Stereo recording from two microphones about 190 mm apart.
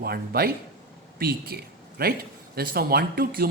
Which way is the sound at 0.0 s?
55° right (ahead or behind).